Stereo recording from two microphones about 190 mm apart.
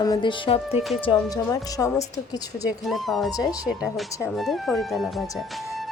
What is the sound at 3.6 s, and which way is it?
Speech, 5° right (ahead or behind).